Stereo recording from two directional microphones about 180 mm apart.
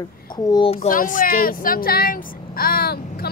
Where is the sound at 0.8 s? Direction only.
45° left (ahead or behind).